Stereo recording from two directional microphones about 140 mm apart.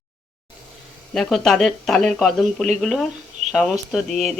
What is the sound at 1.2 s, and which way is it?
Speech, centre (ahead or behind).